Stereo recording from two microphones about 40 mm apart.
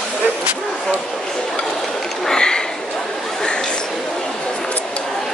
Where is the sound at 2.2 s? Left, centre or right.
Centre.